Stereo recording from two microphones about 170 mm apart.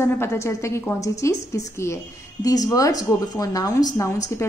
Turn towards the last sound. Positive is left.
turn(degrees=20)  # may be behind; listen again after turning